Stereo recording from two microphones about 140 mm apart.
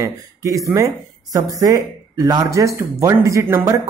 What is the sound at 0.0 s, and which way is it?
Speech, 25° right (ahead or behind).